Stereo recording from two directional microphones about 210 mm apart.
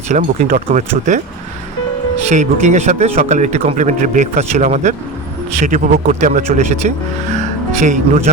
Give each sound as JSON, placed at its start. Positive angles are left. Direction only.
{"t": 0.1, "sound": "speech", "side_deg": -40}
{"t": 2.3, "sound": "speech", "side_deg": -35}